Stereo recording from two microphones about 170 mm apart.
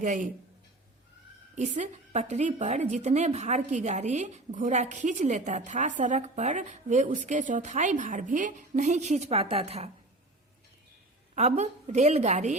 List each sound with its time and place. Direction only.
0.0 s a woman's voice: 45° right (ahead or behind)
1.5 s a woman's voice: 45° right (ahead or behind)
11.3 s a woman's voice: 40° right (ahead or behind)